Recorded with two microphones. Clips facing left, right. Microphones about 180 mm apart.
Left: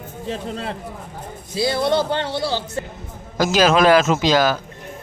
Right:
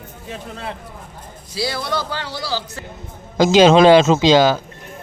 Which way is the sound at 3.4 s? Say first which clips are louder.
Right 5 dB; 25° right (ahead or behind).